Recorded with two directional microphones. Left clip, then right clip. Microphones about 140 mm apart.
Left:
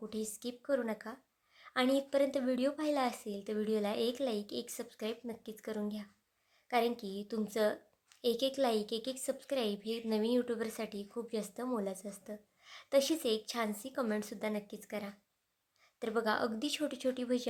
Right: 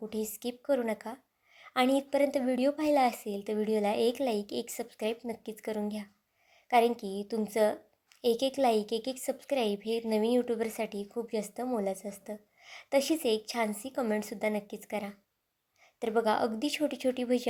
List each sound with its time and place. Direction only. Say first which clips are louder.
0.1 s a woman's voice: right 6 dB; 15° right (ahead or behind)